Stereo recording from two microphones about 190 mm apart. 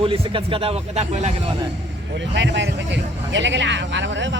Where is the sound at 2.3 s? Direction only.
70° right (ahead or behind).